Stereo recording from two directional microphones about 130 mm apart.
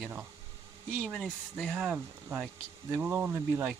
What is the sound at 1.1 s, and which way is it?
Speech, 5° left (ahead or behind).